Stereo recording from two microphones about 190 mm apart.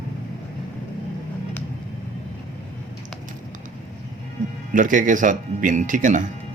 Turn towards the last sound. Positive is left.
turn(degrees=-45)  # may be behind; listen again after turning